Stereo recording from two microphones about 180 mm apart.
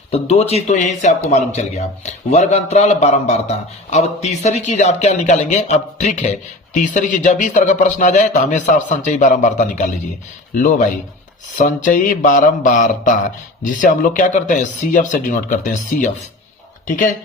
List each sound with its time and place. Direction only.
0.1 s a man's voice: 35° left (ahead or behind)